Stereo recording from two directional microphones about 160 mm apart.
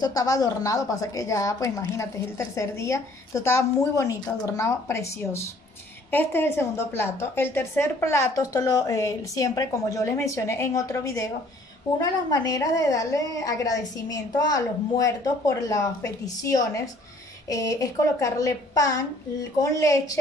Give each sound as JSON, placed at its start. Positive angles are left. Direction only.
{"t": 0.0, "sound": "a woman's voice", "side_deg": 20}